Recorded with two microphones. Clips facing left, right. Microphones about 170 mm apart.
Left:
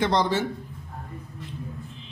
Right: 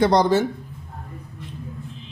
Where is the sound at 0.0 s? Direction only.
40° right (ahead or behind).